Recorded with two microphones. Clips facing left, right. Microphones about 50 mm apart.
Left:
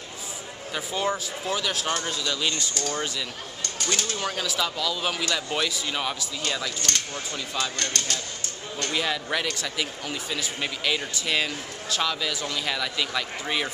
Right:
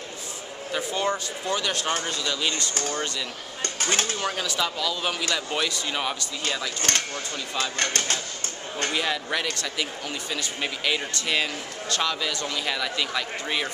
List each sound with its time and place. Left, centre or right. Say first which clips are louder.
0.7 s speech: right 1 dB; centre
3.6 s speech: right 3 dB; right
4.2 s speech: right 1 dB; centre
6.8 s speech: right 2 dB; right
8.9 s speech: left 1 dB; centre